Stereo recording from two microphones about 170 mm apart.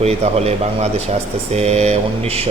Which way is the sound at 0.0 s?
40° right (ahead or behind).